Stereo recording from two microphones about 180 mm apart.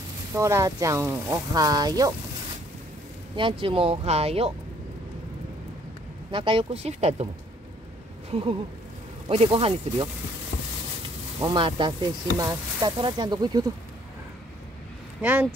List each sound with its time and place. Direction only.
0.3 s speech: 15° right (ahead or behind)
3.3 s speech: 30° right (ahead or behind)
6.3 s speech: 30° right (ahead or behind)
8.3 s a sound: 30° right (ahead or behind)
9.3 s speech: 35° right (ahead or behind)
11.3 s speech: 25° right (ahead or behind)